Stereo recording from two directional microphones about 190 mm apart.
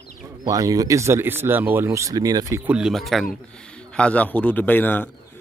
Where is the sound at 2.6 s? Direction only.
5° right (ahead or behind).